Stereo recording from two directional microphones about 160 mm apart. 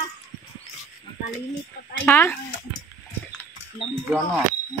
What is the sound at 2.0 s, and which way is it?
Speech, 15° left (ahead or behind).